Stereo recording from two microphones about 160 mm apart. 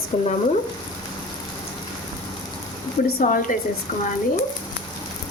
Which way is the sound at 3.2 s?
55° left (ahead or behind).